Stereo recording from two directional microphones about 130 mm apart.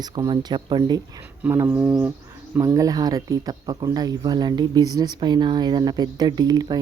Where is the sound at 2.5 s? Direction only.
25° right (ahead or behind).